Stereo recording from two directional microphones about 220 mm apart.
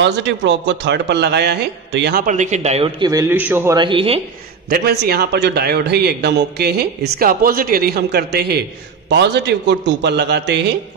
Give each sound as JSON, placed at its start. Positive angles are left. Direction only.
{"t": 0.0, "sound": "a man's voice", "side_deg": -55}
{"t": 3.1, "sound": "a man's voice", "side_deg": -10}
{"t": 4.6, "sound": "a man's voice", "side_deg": -45}